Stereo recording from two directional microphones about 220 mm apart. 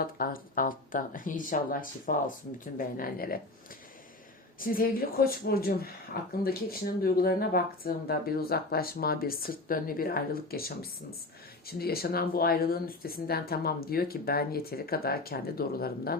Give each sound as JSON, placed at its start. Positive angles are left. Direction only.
{"t": 0.0, "sound": "speech", "side_deg": 40}
{"t": 4.6, "sound": "speech", "side_deg": 40}
{"t": 11.7, "sound": "speech", "side_deg": 45}